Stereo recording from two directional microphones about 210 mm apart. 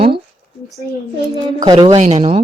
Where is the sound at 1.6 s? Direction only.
20° right (ahead or behind).